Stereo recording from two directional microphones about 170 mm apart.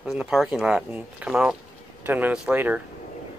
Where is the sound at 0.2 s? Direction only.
Centre (ahead or behind).